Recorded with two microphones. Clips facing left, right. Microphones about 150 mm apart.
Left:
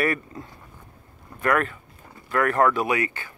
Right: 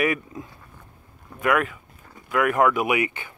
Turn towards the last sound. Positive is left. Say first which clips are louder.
# right 1 dB
turn(degrees=-20)  # may be behind; listen again after turning